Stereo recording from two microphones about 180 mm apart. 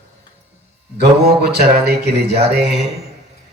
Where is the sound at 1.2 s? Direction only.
60° right (ahead or behind).